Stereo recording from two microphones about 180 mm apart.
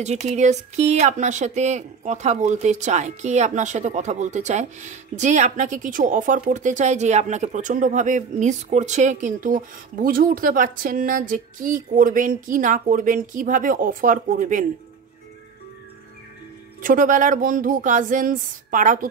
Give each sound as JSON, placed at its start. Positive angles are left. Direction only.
{"t": 0.0, "sound": "speech", "side_deg": -40}
{"t": 16.8, "sound": "speech", "side_deg": -50}